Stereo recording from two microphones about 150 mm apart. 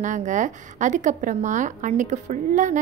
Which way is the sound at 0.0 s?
55° right (ahead or behind).